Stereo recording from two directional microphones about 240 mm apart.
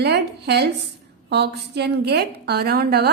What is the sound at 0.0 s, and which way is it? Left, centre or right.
A woman's voice, right.